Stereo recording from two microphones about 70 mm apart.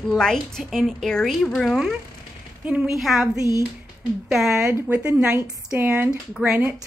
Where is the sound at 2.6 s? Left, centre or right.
Centre.